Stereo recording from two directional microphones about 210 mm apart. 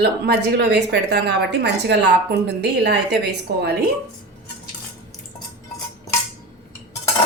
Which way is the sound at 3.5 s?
50° right (ahead or behind).